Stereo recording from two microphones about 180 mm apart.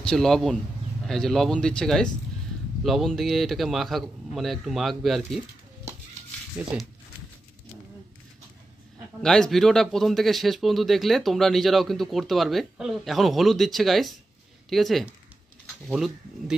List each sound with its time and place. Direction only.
0.0 s a man's voice: 5° left (ahead or behind)
6.6 s speech: 10° right (ahead or behind)
9.2 s a man's voice: 5° left (ahead or behind)